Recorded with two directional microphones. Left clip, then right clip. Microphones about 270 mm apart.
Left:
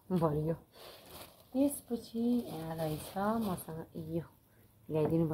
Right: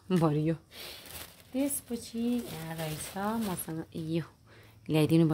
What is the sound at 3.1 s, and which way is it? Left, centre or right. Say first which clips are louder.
Speech: right 2 dB; right.